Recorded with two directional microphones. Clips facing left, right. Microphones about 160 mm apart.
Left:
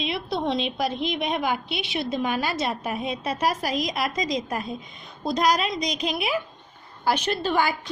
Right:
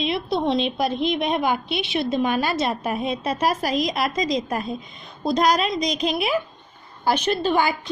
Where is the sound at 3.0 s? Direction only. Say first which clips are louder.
Right 2 dB; 25° right (ahead or behind).